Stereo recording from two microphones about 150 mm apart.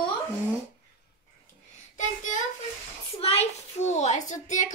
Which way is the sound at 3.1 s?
40° left (ahead or behind).